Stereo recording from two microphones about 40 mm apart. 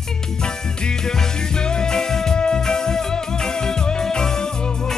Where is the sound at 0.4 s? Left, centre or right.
Centre.